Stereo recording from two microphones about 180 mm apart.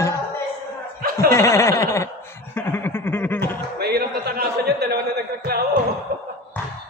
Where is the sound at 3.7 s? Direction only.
60° right (ahead or behind).